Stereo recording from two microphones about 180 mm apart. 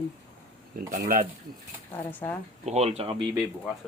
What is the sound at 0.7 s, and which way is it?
Speech, 55° right (ahead or behind).